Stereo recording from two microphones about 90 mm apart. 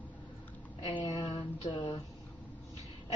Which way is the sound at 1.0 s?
45° left (ahead or behind).